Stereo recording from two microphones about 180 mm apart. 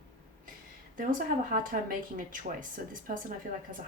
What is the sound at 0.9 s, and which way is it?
Speech, 50° right (ahead or behind).